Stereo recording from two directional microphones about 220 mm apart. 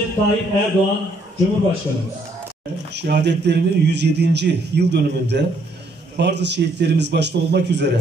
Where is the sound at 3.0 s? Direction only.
50° right (ahead or behind).